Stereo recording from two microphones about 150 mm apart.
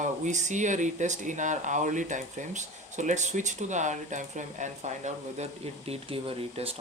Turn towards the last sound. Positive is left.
turn(degrees=-40)  # may be behind; listen again after turning